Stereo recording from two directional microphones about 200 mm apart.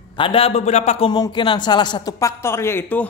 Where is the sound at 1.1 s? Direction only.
20° left (ahead or behind).